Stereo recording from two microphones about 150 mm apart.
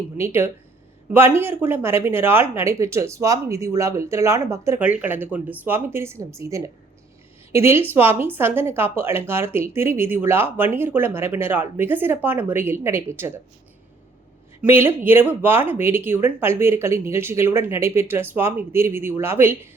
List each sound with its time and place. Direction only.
0.2 s speech: 15° right (ahead or behind)
14.6 s speech: 15° right (ahead or behind)